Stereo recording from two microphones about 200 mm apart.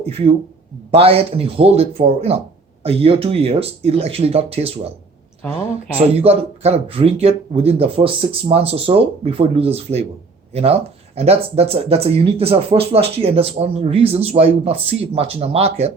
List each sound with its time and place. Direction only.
0.0 s speech: 30° right (ahead or behind)
6.0 s speech: 30° right (ahead or behind)